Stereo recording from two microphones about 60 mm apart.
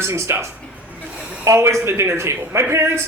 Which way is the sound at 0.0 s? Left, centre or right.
Right.